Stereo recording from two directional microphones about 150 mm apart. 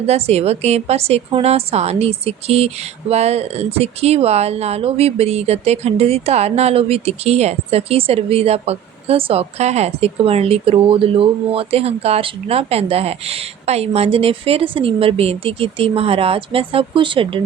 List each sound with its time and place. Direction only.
0.0 s a woman's voice: 45° right (ahead or behind)